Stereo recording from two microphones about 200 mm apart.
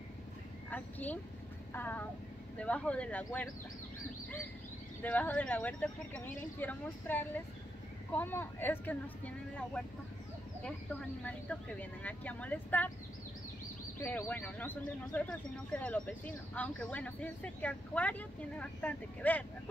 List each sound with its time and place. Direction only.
0.7 s speech: 10° left (ahead or behind)
5.0 s speech: 5° left (ahead or behind)
13.9 s speech: 10° left (ahead or behind)